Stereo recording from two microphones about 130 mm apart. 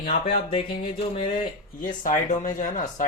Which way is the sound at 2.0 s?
80° left.